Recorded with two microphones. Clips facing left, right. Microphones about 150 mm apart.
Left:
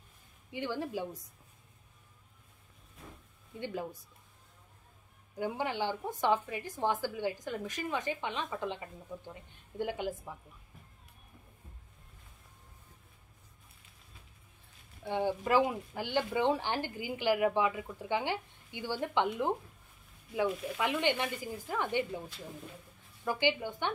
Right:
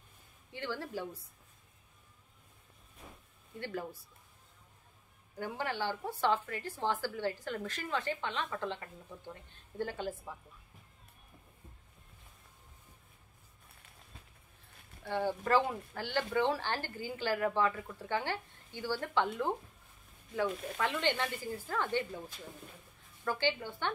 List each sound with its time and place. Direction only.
0.5 s a woman's voice: 15° left (ahead or behind)
3.5 s a woman's voice: 15° left (ahead or behind)
5.4 s a woman's voice: 15° left (ahead or behind)
15.0 s a woman's voice: 15° left (ahead or behind)
20.7 s a woman's voice: 15° left (ahead or behind)
23.2 s a woman's voice: 15° left (ahead or behind)